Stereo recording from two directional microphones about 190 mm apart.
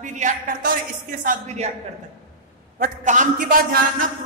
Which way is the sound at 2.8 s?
40° right (ahead or behind).